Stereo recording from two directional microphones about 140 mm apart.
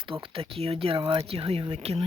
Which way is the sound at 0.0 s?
40° right (ahead or behind).